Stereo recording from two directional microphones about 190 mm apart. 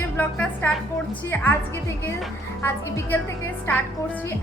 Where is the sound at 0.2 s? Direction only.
10° left (ahead or behind).